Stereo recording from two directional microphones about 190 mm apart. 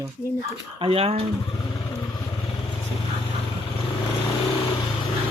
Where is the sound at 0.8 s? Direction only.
30° right (ahead or behind).